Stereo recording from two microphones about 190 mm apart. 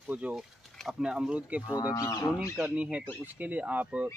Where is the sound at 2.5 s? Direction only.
5° right (ahead or behind).